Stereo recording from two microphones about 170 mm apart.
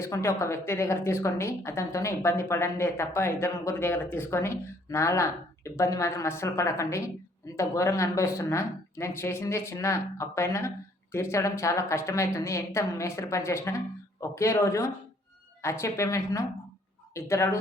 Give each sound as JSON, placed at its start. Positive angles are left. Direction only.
{"t": 0.0, "sound": "a woman's voice", "side_deg": 15}